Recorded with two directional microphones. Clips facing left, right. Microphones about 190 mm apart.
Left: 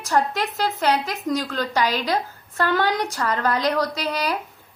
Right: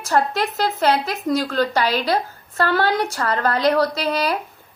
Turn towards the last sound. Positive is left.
turn(degrees=15)  # may be behind; listen again after turning